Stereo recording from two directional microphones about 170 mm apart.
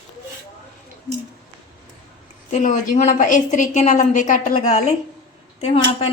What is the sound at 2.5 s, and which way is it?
A woman's voice, 45° left (ahead or behind).